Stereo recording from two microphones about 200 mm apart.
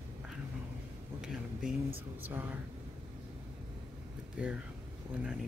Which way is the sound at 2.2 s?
10° right (ahead or behind).